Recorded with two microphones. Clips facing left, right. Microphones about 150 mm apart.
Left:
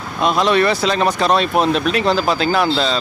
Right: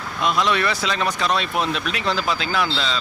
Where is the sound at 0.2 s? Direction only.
35° left (ahead or behind).